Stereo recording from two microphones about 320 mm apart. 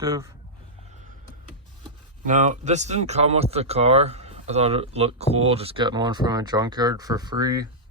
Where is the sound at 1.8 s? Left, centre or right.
Right.